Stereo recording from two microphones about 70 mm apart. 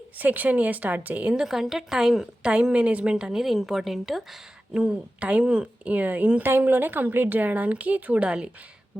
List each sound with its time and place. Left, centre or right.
0.2 s speech: right
1.4 s a woman's voice: centre